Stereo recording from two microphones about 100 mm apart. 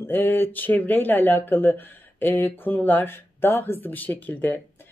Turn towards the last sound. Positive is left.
turn(degrees=20)  # may be behind; listen again after turning